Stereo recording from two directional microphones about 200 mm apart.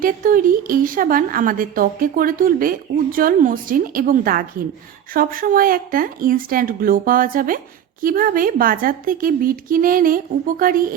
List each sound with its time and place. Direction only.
0.0 s a woman's voice: 45° right (ahead or behind)